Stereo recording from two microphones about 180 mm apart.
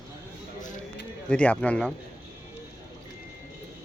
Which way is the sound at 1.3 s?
5° left (ahead or behind).